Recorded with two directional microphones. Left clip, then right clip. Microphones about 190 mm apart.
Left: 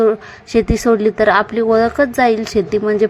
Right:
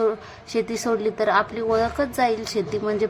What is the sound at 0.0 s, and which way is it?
A woman's voice, 25° left (ahead or behind).